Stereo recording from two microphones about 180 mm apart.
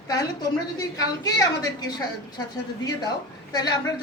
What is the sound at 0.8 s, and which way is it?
A woman's voice, 20° left (ahead or behind).